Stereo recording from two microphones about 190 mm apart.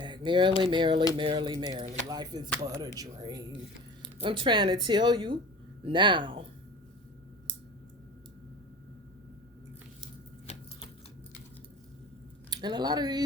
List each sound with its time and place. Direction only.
0.3 s speech: 25° right (ahead or behind)
10.4 s a sound: 35° left (ahead or behind)
12.5 s speech: 20° right (ahead or behind)